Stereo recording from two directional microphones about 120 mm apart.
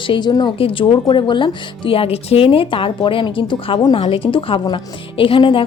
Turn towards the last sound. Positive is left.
turn(degrees=45)  # may be behind; listen again after turning